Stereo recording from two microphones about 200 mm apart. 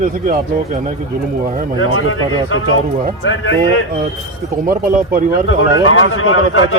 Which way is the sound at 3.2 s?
70° left (ahead or behind).